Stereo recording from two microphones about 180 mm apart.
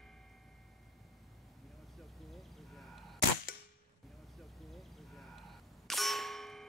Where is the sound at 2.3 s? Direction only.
Centre (ahead or behind).